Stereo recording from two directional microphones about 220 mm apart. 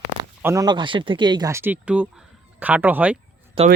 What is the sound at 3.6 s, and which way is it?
Speech, 25° right (ahead or behind).